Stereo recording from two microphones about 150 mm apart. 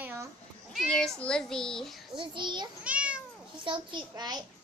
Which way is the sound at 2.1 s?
30° right (ahead or behind).